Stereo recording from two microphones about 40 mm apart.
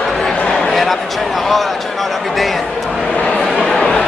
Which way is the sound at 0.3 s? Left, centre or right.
Left.